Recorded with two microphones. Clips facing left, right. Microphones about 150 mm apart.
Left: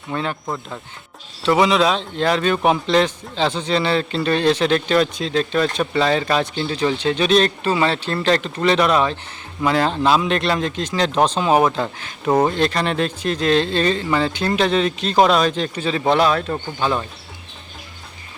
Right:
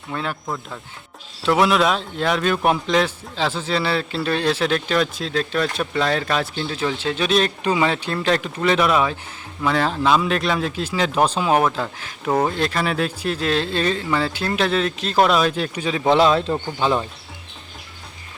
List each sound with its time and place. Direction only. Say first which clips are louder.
0.1 s a man's voice: left 3 dB; centre (ahead or behind)
0.4 s speech: left 2 dB; 10° left (ahead or behind)
1.5 s a man's voice: left 1 dB; centre (ahead or behind)
16.1 s speech: right 4 dB; 20° right (ahead or behind)